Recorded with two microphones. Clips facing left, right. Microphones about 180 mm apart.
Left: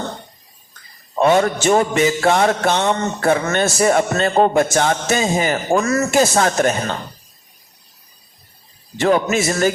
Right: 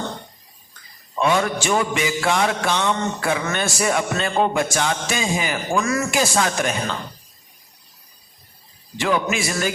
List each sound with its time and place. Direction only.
1.3 s a man's voice: 45° left (ahead or behind)
1.6 s music: 45° left (ahead or behind)
9.0 s a man's voice: 45° left (ahead or behind)